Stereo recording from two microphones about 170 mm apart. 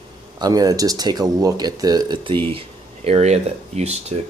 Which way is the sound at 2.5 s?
40° right (ahead or behind).